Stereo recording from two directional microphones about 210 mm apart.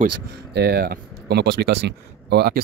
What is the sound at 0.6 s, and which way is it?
Speech, 45° right (ahead or behind).